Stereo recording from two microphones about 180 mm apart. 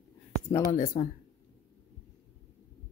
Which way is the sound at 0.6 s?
50° left (ahead or behind).